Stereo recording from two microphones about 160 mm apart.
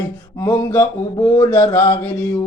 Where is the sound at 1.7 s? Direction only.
10° left (ahead or behind).